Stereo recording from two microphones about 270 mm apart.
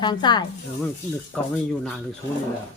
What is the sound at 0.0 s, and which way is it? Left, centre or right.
Speech, centre.